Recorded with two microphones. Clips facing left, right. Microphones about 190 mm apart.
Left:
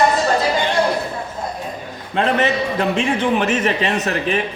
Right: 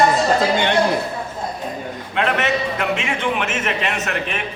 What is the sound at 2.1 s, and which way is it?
A man's voice, 35° left (ahead or behind).